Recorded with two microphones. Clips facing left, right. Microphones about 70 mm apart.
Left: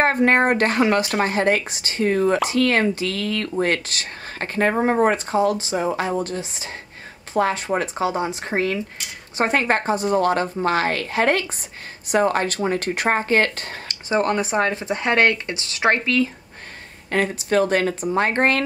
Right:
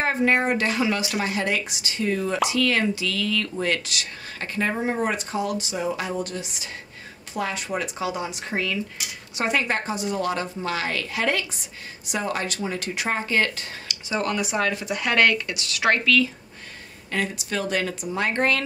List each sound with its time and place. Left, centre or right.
0.0 s speech: left
17.1 s speech: left